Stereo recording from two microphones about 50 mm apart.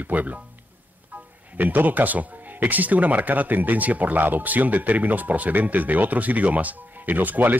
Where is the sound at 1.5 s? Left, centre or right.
Right.